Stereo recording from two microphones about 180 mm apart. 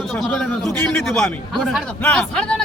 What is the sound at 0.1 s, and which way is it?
A man's voice, 5° left (ahead or behind).